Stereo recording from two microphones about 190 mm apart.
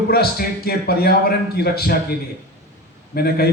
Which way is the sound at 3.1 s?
55° left (ahead or behind).